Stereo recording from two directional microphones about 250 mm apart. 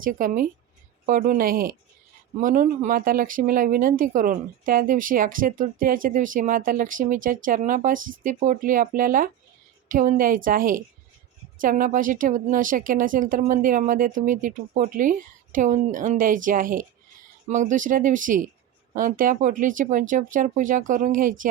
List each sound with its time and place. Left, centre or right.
0.0 s speech: right